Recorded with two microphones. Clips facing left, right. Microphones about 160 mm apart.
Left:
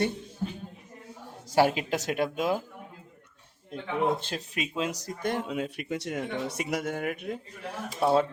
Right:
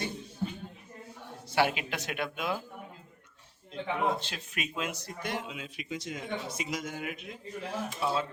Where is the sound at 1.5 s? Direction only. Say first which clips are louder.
Left 5 dB; 40° left (ahead or behind).